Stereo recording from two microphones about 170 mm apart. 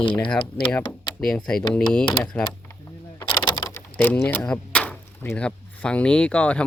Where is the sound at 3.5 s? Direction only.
25° left (ahead or behind).